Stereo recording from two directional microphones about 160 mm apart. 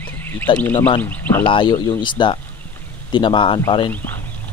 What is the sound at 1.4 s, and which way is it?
Speech, 30° left (ahead or behind).